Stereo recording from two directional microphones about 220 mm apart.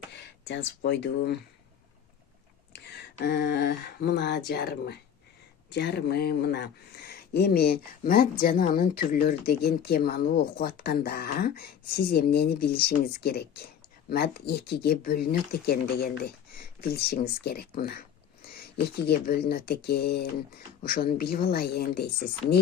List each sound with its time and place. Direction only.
0.1 s speech: 55° left (ahead or behind)
2.7 s speech: 50° left (ahead or behind)